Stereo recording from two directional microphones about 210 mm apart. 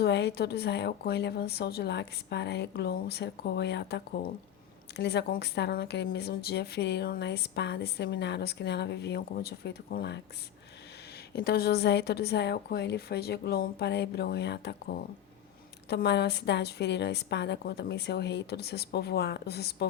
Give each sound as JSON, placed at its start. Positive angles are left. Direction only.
{"t": 0.0, "sound": "a woman's voice", "side_deg": 55}
{"t": 11.3, "sound": "a woman's voice", "side_deg": 50}